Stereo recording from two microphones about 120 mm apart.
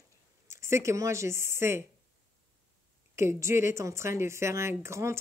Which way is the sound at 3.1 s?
20° right (ahead or behind).